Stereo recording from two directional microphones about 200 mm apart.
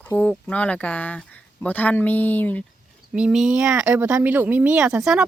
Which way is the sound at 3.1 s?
5° right (ahead or behind).